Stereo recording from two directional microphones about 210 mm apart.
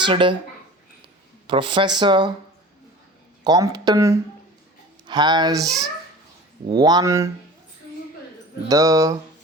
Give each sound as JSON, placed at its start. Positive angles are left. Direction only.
{"t": 0.0, "sound": "speech", "side_deg": -25}
{"t": 1.5, "sound": "speech", "side_deg": -25}
{"t": 3.4, "sound": "speech", "side_deg": -20}
{"t": 6.7, "sound": "speech", "side_deg": -20}
{"t": 8.6, "sound": "speech", "side_deg": -15}